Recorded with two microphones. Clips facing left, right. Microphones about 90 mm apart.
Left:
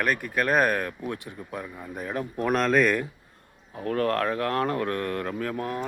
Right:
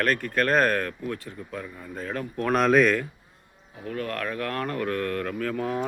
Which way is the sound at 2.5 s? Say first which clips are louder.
Right 2 dB; 5° right (ahead or behind).